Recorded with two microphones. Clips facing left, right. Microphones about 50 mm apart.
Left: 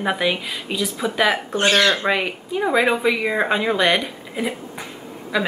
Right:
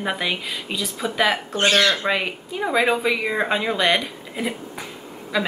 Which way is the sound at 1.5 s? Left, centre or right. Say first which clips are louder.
Left 1 dB; left.